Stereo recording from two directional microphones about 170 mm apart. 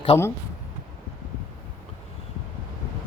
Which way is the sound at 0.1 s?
35° left (ahead or behind).